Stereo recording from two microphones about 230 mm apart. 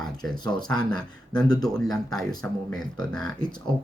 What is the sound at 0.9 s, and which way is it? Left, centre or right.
Speech, centre.